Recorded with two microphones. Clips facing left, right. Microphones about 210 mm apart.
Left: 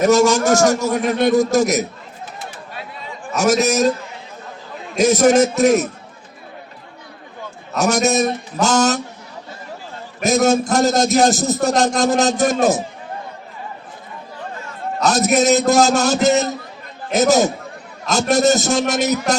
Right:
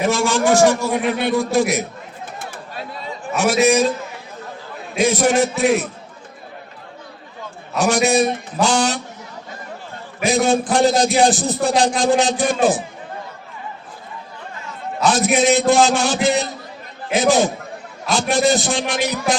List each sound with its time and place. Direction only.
0.0 s a man's voice: 40° left (ahead or behind)
3.3 s a man's voice: 40° left (ahead or behind)
4.9 s a man's voice: 45° left (ahead or behind)
7.8 s a man's voice: 40° left (ahead or behind)
10.2 s a man's voice: 40° left (ahead or behind)
15.0 s a man's voice: 40° left (ahead or behind)